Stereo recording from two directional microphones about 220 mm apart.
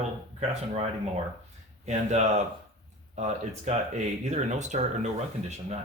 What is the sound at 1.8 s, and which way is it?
Speech, 30° right (ahead or behind).